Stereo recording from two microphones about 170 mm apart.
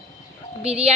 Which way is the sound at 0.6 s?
35° right (ahead or behind).